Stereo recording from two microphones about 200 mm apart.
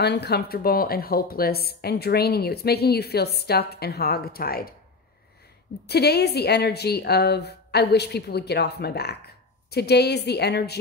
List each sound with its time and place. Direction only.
0.0 s speech: 55° left (ahead or behind)
5.9 s a woman's voice: 55° left (ahead or behind)